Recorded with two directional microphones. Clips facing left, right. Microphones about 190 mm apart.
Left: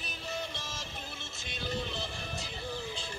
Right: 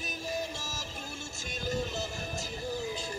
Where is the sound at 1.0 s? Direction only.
45° right (ahead or behind).